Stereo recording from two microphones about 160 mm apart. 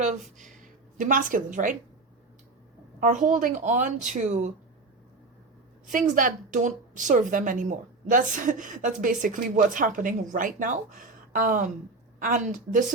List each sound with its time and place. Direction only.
0.0 s a woman's voice: 50° right (ahead or behind)
3.0 s speech: 50° right (ahead or behind)
5.9 s a woman's voice: 55° right (ahead or behind)